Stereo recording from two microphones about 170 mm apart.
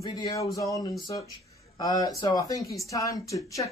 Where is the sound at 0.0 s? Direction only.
20° left (ahead or behind).